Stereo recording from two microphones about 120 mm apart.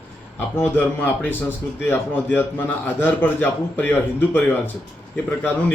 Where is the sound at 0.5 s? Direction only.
20° left (ahead or behind).